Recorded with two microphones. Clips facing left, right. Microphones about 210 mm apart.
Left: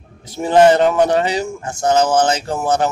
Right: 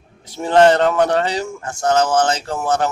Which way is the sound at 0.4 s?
10° left (ahead or behind).